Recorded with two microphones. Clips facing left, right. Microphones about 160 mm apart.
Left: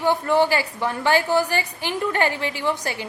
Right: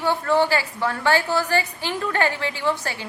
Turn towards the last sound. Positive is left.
turn(degrees=15)  # may be behind; listen again after turning